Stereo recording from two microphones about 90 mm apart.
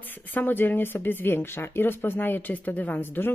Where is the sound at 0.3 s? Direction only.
20° left (ahead or behind).